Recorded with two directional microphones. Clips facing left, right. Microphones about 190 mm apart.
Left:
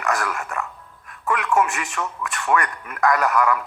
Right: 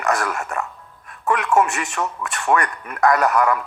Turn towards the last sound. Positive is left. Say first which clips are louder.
# right 2 dB
turn(degrees=-35)  # may be behind; listen again after turning